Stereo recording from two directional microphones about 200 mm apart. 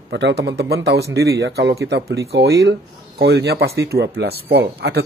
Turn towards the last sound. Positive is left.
turn(degrees=-55)  # may be behind; listen again after turning